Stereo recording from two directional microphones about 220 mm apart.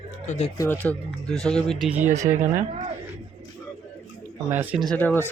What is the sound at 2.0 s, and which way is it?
Speech, 35° right (ahead or behind).